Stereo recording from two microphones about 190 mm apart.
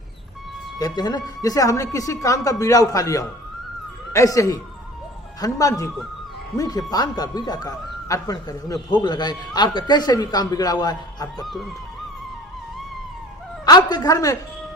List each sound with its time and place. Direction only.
0.8 s a man's voice: 20° left (ahead or behind)
11.4 s speech: centre (ahead or behind)
13.7 s a man's voice: 20° left (ahead or behind)